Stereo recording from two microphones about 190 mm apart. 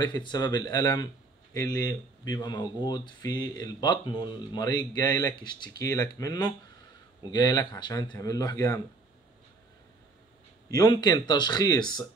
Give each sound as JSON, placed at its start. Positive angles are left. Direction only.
{"t": 0.0, "sound": "speech", "side_deg": 25}
{"t": 10.7, "sound": "speech", "side_deg": 20}